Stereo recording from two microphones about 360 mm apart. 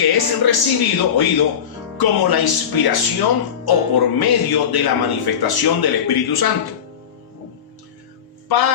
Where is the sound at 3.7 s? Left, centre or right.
Left.